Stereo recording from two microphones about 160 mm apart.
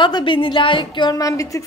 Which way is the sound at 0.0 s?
30° left (ahead or behind).